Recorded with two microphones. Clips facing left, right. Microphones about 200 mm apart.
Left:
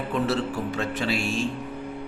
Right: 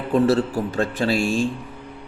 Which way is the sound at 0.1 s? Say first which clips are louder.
Right 9 dB; 35° right (ahead or behind).